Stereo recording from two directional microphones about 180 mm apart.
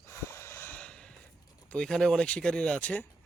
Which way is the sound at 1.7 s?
5° left (ahead or behind).